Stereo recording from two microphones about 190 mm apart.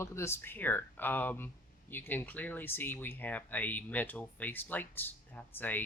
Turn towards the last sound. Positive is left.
turn(degrees=10)  # may be behind; listen again after turning